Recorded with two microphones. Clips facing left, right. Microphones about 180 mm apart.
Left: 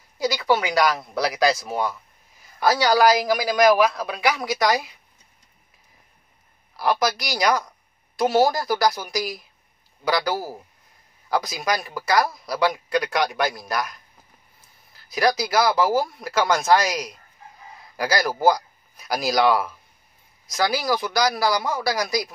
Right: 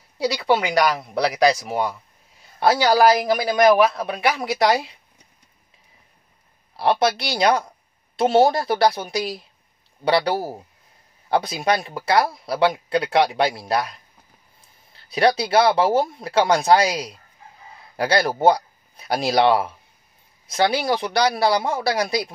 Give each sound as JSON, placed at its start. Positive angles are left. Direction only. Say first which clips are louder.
{"t": 0.2, "sound": "speech", "louder": "right 1 dB", "side_deg": -30}
{"t": 6.8, "sound": "speech", "louder": "right 3 dB", "side_deg": -30}